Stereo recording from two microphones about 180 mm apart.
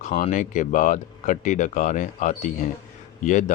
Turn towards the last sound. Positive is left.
turn(degrees=45)  # may be behind; listen again after turning